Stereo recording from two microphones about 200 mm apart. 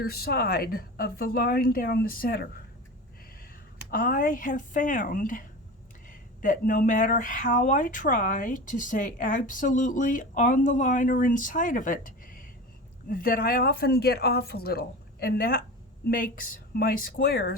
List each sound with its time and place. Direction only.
0.0 s speech: 50° left (ahead or behind)
3.9 s speech: 45° left (ahead or behind)